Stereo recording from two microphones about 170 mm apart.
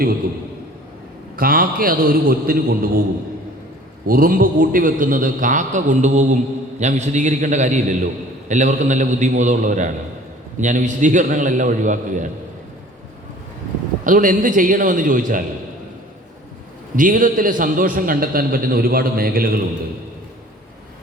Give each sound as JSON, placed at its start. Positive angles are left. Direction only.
{"t": 1.4, "sound": "a man's voice", "side_deg": -60}
{"t": 4.0, "sound": "a man's voice", "side_deg": -55}
{"t": 14.0, "sound": "a man's voice", "side_deg": -50}
{"t": 16.9, "sound": "a man's voice", "side_deg": -50}